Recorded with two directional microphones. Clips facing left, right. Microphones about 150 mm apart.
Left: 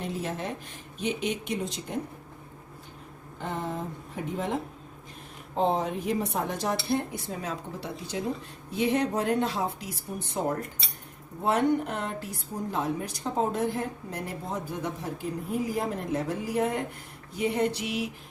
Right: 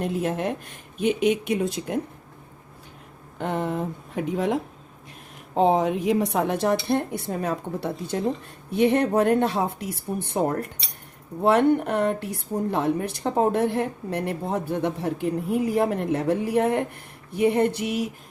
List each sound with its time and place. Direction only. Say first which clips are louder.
0.0 s speech: right 7 dB; 55° right (ahead or behind)
3.3 s speech: right 7 dB; 65° right (ahead or behind)
5.6 s speech: right 6 dB; 85° right; by 16.8 s 60° right (ahead or behind)
17.3 s a sound: right 6 dB; 55° right (ahead or behind)